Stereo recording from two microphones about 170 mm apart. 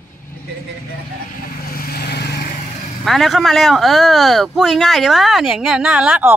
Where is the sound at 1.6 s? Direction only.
60° left (ahead or behind).